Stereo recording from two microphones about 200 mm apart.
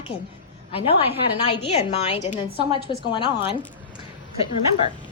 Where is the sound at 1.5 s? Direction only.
30° left (ahead or behind).